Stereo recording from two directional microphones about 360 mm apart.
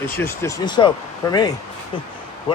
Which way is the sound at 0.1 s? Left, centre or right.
Centre.